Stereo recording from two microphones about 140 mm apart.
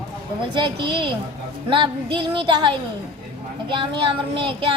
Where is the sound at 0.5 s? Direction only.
35° right (ahead or behind).